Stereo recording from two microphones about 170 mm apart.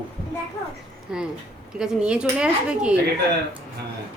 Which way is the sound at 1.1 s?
5° right (ahead or behind).